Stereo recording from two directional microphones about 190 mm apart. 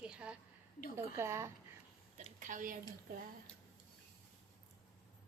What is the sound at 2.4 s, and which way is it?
Speech, 45° right (ahead or behind).